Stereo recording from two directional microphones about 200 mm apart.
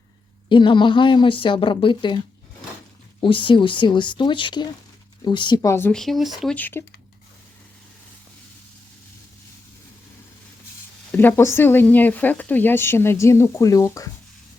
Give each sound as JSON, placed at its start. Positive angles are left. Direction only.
{"t": 0.4, "sound": "a woman's voice", "side_deg": 25}
{"t": 11.1, "sound": "speech", "side_deg": 10}